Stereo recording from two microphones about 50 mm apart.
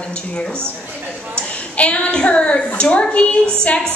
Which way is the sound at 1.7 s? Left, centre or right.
Left.